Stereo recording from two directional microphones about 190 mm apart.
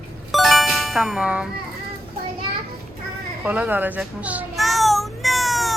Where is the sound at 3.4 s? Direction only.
10° right (ahead or behind).